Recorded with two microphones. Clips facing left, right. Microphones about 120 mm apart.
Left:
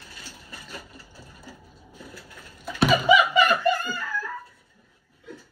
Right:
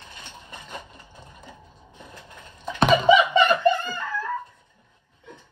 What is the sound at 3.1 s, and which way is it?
Laughter, 25° right (ahead or behind).